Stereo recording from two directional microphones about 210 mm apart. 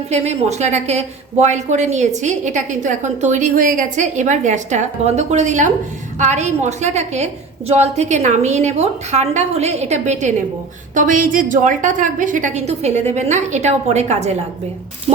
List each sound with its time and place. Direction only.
0.1 s a woman's voice: 30° right (ahead or behind)